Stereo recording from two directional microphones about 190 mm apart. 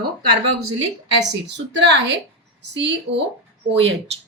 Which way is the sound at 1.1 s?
70° right (ahead or behind).